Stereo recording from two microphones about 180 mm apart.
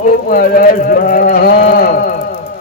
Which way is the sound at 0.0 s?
50° left (ahead or behind).